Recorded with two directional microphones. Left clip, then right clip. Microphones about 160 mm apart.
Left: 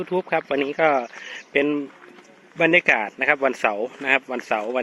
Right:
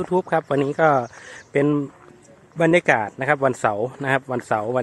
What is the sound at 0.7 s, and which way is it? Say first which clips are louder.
Speech: right 2 dB; 20° right (ahead or behind).